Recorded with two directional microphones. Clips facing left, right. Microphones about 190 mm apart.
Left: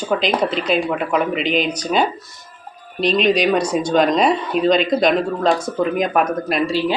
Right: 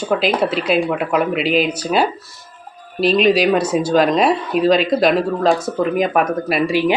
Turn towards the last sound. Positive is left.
turn(degrees=-10)  # may be behind; listen again after turning